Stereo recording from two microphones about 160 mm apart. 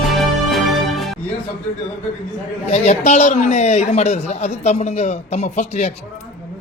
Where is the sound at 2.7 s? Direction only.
45° left (ahead or behind).